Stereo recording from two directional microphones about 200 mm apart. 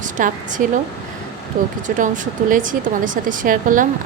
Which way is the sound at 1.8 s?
40° right (ahead or behind).